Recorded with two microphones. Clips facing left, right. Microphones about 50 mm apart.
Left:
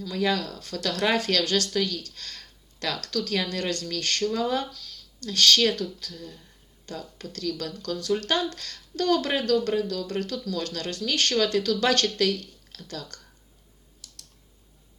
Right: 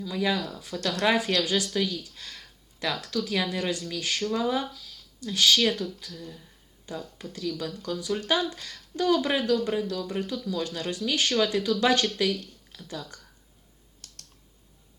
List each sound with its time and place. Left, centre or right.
0.0 s speech: centre
14.0 s computer keyboard: right